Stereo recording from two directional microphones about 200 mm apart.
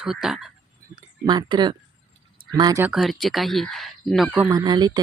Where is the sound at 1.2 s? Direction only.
20° right (ahead or behind).